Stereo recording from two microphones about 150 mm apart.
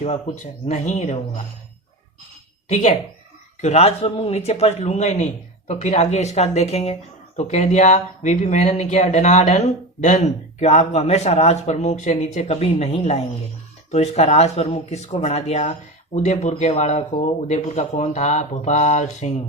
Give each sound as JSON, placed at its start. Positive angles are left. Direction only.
{"t": 0.0, "sound": "speech", "side_deg": 50}
{"t": 2.6, "sound": "speech", "side_deg": 50}